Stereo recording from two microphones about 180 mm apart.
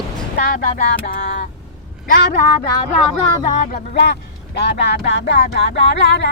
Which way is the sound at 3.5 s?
45° left (ahead or behind).